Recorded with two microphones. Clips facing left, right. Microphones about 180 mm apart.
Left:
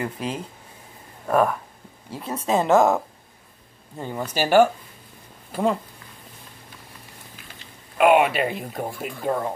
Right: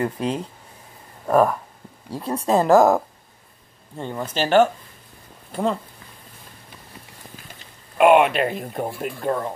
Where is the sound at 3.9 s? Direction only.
5° left (ahead or behind).